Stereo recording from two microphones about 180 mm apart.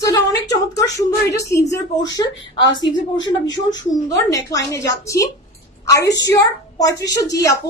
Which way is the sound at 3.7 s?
20° left (ahead or behind).